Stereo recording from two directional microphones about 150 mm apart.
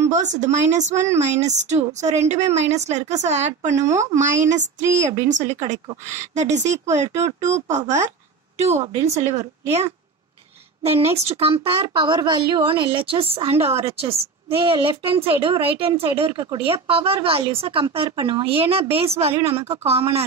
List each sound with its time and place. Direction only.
0.1 s speech: 55° right (ahead or behind)